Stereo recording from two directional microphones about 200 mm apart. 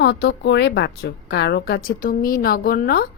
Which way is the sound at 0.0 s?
55° left (ahead or behind).